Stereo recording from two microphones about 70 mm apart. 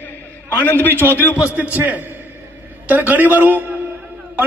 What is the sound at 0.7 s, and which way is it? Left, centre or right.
A man's voice, right.